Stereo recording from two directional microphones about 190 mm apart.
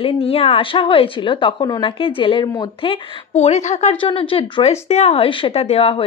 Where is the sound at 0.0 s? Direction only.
30° left (ahead or behind).